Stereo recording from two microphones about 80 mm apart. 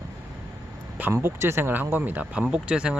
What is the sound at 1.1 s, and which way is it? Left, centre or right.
Speech, right.